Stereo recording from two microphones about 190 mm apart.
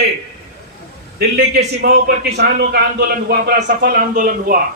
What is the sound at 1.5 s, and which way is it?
A man's voice, 60° right (ahead or behind).